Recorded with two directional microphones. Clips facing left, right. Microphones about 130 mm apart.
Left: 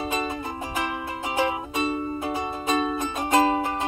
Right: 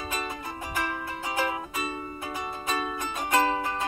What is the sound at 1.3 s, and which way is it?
Music, 20° left (ahead or behind).